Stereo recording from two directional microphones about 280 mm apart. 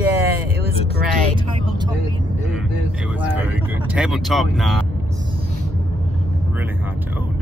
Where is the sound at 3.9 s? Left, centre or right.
Centre.